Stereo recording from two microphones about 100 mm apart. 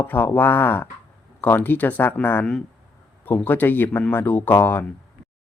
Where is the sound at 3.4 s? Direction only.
20° left (ahead or behind).